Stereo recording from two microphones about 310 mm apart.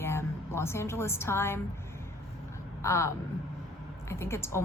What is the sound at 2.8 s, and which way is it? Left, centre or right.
A woman's voice, centre.